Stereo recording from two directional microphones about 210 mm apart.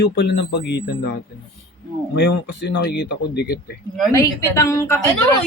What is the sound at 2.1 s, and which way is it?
Speech, 55° left (ahead or behind).